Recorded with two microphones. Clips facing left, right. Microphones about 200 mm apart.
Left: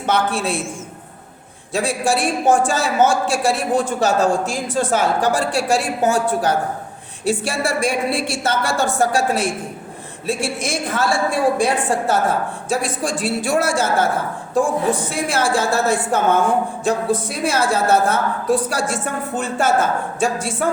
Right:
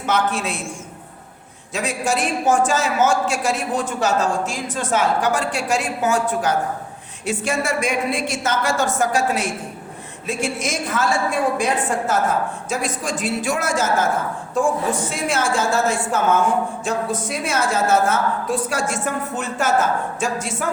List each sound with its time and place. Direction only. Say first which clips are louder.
0.1 s a man's voice: left 2 dB; 30° left (ahead or behind)
1.7 s a man's voice: left 3 dB; 30° left (ahead or behind)
17.1 s a man's voice: left 4 dB; 35° left (ahead or behind)